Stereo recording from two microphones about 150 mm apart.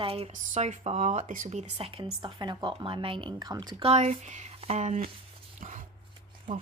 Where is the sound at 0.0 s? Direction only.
40° right (ahead or behind).